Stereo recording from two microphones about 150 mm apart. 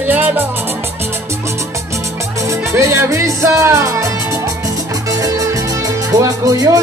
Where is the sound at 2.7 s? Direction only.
15° right (ahead or behind).